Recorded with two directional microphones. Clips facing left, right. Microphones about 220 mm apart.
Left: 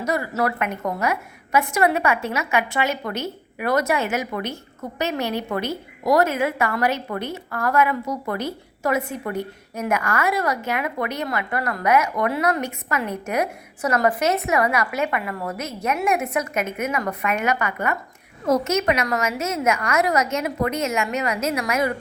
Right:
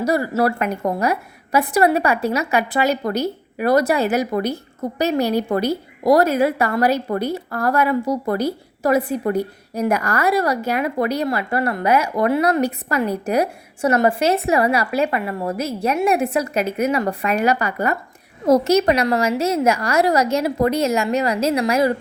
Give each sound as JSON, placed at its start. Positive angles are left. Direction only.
{"t": 0.0, "sound": "a woman's voice", "side_deg": -35}